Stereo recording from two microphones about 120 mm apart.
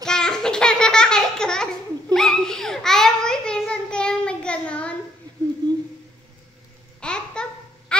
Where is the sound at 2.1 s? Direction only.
5° left (ahead or behind).